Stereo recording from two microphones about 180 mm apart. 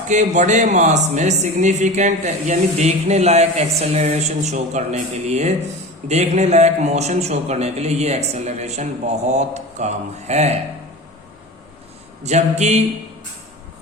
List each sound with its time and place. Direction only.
0.1 s speech: 45° right (ahead or behind)
12.2 s speech: 40° right (ahead or behind)